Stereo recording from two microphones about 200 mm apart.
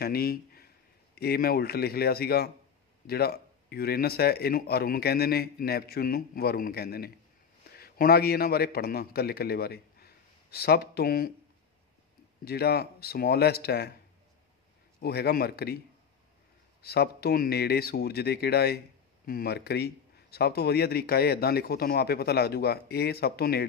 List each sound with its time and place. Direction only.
0.0 s a man's voice: 50° left (ahead or behind)
12.4 s speech: 55° left (ahead or behind)
15.0 s speech: 50° left (ahead or behind)
16.8 s speech: 50° left (ahead or behind)